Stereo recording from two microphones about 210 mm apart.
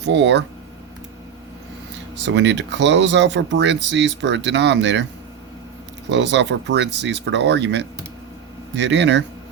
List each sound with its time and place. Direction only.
0.0 s speech: 55° right (ahead or behind)
2.2 s speech: 55° right (ahead or behind)
6.1 s speech: 60° right (ahead or behind)